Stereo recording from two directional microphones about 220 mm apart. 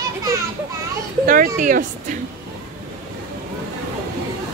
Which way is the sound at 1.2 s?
40° right (ahead or behind).